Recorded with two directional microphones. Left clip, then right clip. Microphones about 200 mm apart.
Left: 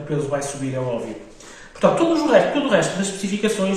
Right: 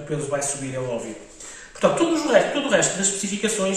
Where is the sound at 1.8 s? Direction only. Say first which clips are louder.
Left 3 dB; centre (ahead or behind).